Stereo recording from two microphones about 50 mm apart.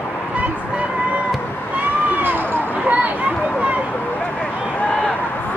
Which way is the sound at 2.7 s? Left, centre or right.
Right.